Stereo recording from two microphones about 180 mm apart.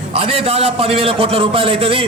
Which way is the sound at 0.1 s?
30° right (ahead or behind).